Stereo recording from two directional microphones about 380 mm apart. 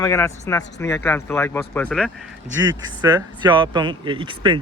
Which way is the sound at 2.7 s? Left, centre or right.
Centre.